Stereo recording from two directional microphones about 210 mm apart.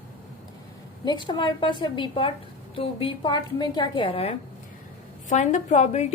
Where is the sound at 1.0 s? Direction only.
20° left (ahead or behind).